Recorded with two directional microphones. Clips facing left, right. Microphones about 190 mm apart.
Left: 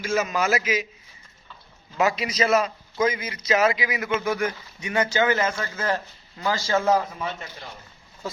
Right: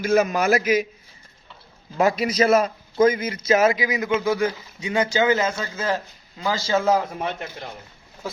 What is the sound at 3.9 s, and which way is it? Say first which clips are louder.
Speech: right 4 dB; 20° right (ahead or behind).